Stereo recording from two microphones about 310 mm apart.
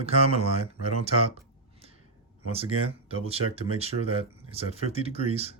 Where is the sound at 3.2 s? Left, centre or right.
Centre.